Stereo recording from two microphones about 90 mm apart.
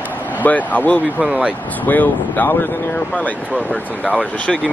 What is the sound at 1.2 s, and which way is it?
Speech, 10° right (ahead or behind).